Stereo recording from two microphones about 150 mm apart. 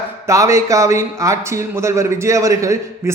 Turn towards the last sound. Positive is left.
turn(degrees=-20)  # may be behind; listen again after turning